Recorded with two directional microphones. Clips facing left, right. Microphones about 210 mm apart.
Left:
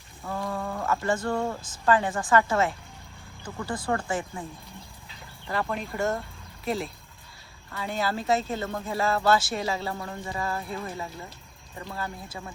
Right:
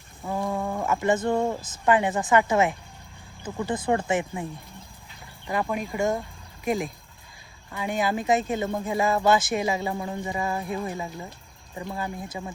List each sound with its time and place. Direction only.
0.3 s speech: 20° right (ahead or behind)
5.5 s speech: 10° right (ahead or behind)